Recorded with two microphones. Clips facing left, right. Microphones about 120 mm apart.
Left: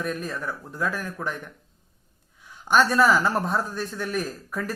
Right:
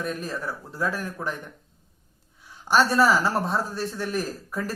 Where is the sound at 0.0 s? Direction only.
30° right (ahead or behind).